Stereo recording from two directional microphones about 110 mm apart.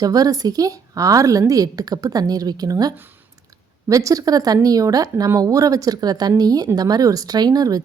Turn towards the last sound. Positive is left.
turn(degrees=-35)  # may be behind; listen again after turning